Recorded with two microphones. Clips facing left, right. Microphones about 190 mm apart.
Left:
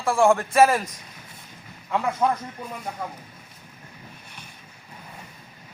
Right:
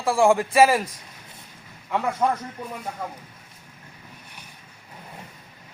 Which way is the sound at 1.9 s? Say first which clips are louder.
Even; centre (ahead or behind).